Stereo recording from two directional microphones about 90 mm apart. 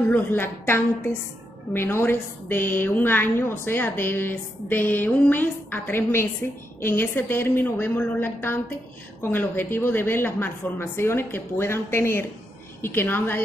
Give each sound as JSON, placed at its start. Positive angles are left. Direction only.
{"t": 0.1, "sound": "a woman's voice", "side_deg": 25}